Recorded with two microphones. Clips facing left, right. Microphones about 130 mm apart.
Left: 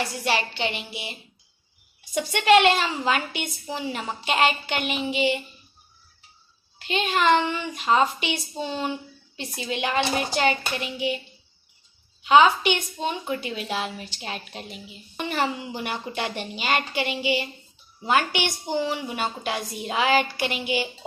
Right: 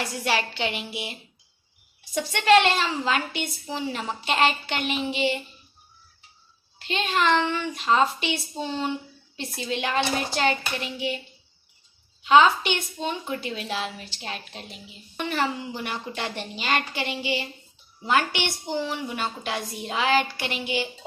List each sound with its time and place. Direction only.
0.3 s speech: centre (ahead or behind)
2.3 s a woman's voice: 5° left (ahead or behind)
6.8 s a woman's voice: 10° left (ahead or behind)
12.3 s a woman's voice: 15° left (ahead or behind)
15.1 s a woman's voice: 15° left (ahead or behind)